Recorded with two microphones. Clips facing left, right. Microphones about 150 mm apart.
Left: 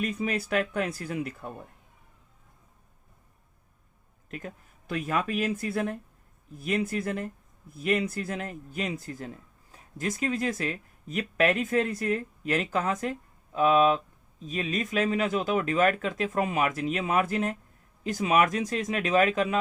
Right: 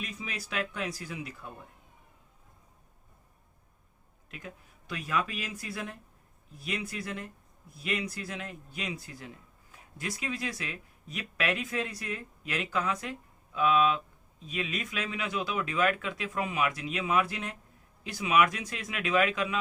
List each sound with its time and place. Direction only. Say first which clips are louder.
0.0 s speech: left 11 dB; 55° left (ahead or behind)
4.3 s speech: left 6 dB; 45° left (ahead or behind)